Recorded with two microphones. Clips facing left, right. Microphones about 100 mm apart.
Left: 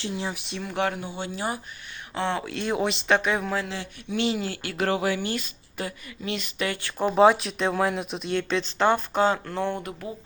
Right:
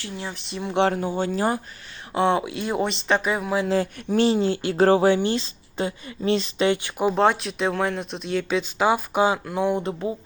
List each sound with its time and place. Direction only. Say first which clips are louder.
0.0 s speech: left 2 dB; 15° left (ahead or behind)
0.6 s speech: right 6 dB; 25° right (ahead or behind)
0.9 s speech: right 8 dB; 40° right (ahead or behind)
2.1 s speech: right 7 dB; 25° right (ahead or behind)
2.6 s speech: right 1 dB; centre (ahead or behind)
3.7 s speech: right 10 dB; 40° right (ahead or behind)
7.2 s speech: left 5 dB; centre (ahead or behind)